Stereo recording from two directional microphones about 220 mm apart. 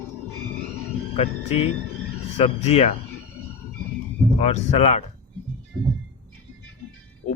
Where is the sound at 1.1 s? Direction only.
30° left (ahead or behind).